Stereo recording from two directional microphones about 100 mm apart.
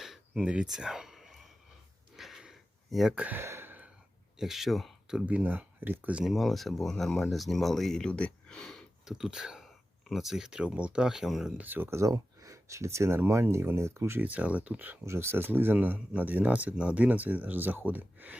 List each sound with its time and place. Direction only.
0.0 s throat clearing: 5° right (ahead or behind)
2.1 s a sound: 5° right (ahead or behind)
3.2 s a sound: 25° right (ahead or behind)
4.4 s speech: 5° right (ahead or behind)
6.2 s speech: centre (ahead or behind)
11.5 s speech: 20° right (ahead or behind)
14.3 s speech: 15° right (ahead or behind)